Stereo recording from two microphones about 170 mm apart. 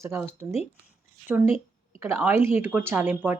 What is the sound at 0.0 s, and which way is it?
Speech, 15° right (ahead or behind).